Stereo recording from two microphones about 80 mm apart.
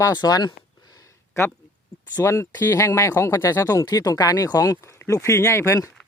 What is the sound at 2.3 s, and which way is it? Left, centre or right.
Speech, left.